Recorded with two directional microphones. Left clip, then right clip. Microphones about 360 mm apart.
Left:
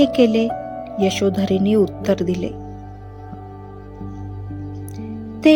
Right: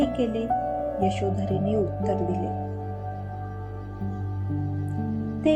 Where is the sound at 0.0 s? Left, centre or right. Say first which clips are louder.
Left 10 dB; left.